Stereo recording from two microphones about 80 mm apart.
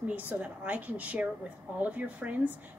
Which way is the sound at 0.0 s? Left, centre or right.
Centre.